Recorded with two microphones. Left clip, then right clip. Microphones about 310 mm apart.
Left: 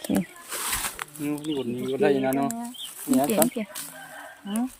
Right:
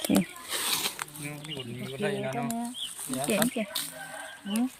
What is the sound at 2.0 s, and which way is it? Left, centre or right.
Speech, left.